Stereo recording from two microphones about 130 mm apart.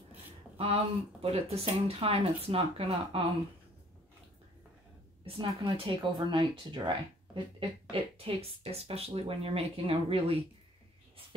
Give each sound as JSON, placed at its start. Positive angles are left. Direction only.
{"t": 0.1, "sound": "speech", "side_deg": -50}
{"t": 5.2, "sound": "speech", "side_deg": -40}
{"t": 7.9, "sound": "speech", "side_deg": -50}